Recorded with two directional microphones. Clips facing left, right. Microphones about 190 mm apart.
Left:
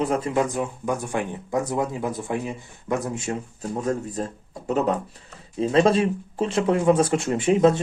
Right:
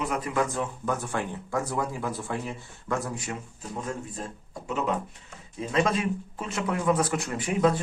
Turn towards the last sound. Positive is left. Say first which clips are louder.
# left 6 dB
turn(degrees=25)  # may be behind; listen again after turning